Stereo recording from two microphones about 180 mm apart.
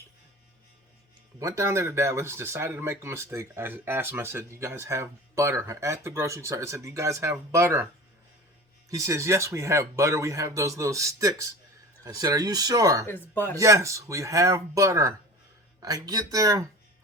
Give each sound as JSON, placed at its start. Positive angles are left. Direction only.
{"t": 1.4, "sound": "speech", "side_deg": -15}
{"t": 8.9, "sound": "speech", "side_deg": -15}
{"t": 13.1, "sound": "speech", "side_deg": 10}
{"t": 13.6, "sound": "speech", "side_deg": -15}